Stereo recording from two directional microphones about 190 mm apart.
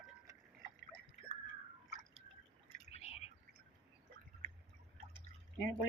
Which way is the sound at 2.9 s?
35° left (ahead or behind).